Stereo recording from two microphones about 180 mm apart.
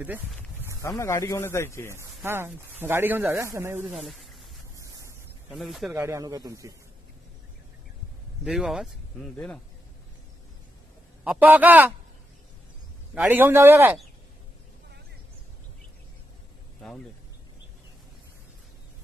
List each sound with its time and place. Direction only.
0.7 s speech: 15° left (ahead or behind)
2.0 s speech: 15° right (ahead or behind)
3.9 s speech: centre (ahead or behind)
4.7 s a sound: 15° right (ahead or behind)
5.5 s speech: centre (ahead or behind)
5.9 s speech: 15° right (ahead or behind)
8.5 s speech: centre (ahead or behind)
11.2 s speech: 10° right (ahead or behind)
13.1 s speech: 10° right (ahead or behind)
16.8 s speech: 5° left (ahead or behind)